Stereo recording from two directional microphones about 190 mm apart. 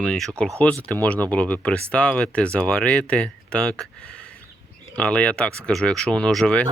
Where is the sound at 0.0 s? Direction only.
5° left (ahead or behind).